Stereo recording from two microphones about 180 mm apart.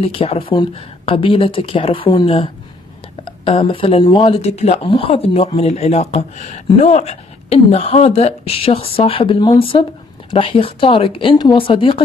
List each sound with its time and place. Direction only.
0.0 s speech: 35° left (ahead or behind)